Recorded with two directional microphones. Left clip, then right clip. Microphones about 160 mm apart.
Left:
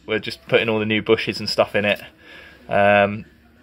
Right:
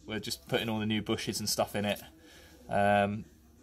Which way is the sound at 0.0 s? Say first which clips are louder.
Left 14 dB; 30° left (ahead or behind).